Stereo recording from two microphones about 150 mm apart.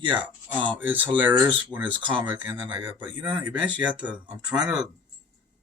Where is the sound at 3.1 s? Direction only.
30° right (ahead or behind).